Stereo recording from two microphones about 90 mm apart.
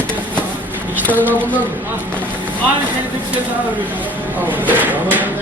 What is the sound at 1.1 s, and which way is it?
Speech, 20° right (ahead or behind).